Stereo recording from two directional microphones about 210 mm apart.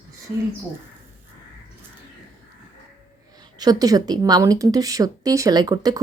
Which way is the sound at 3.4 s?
20° right (ahead or behind).